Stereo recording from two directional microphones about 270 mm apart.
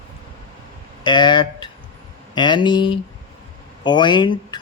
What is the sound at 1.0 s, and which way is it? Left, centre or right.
Speech, centre.